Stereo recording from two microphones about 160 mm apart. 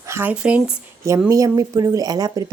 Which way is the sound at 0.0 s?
15° right (ahead or behind).